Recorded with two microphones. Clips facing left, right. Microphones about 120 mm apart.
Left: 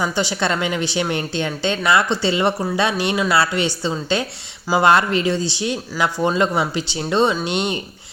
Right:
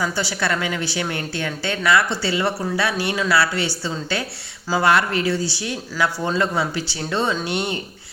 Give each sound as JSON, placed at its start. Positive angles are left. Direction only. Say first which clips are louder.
{"t": 0.0, "sound": "speech", "louder": "left 3 dB", "side_deg": 20}